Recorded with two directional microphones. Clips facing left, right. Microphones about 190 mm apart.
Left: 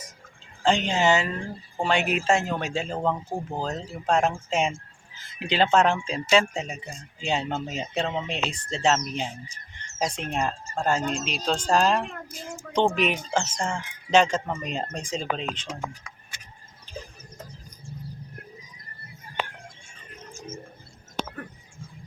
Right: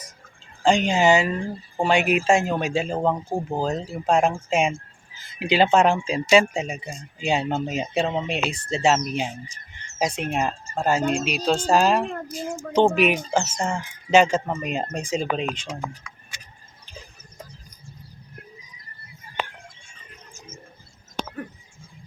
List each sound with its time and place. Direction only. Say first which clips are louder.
0.6 s speech: right 4 dB; 10° right (ahead or behind)
16.3 s tick-tock: right 2 dB; 55° left (ahead or behind)